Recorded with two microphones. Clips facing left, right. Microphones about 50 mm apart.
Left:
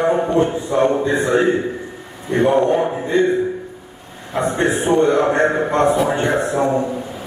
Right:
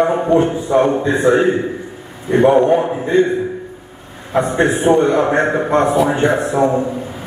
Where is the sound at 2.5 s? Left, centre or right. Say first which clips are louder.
Right 3 dB; centre.